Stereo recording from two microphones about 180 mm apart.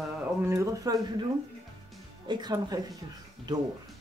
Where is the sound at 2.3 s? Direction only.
25° right (ahead or behind).